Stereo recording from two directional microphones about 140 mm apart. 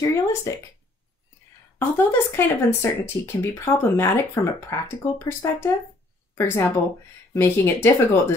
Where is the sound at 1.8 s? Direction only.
20° left (ahead or behind).